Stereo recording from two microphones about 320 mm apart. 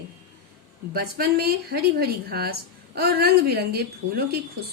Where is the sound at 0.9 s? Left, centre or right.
Right.